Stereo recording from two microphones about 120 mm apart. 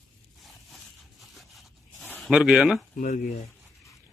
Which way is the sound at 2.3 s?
5° right (ahead or behind).